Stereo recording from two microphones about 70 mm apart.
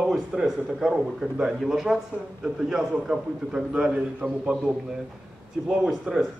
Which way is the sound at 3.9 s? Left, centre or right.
Centre.